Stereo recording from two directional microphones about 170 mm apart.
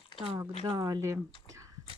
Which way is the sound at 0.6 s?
20° right (ahead or behind).